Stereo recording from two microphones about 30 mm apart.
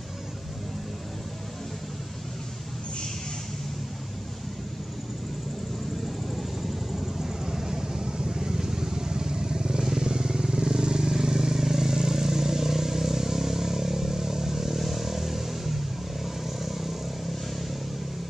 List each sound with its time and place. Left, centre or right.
7.2 s vehicle: centre